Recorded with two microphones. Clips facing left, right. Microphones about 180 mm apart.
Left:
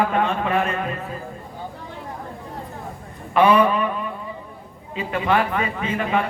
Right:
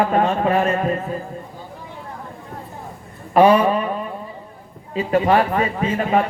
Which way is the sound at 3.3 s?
30° right (ahead or behind).